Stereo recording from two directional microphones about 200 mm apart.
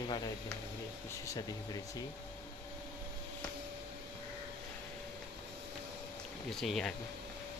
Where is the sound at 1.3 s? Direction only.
20° left (ahead or behind).